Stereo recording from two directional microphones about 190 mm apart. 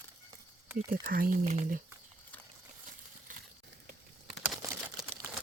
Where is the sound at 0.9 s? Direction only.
50° right (ahead or behind).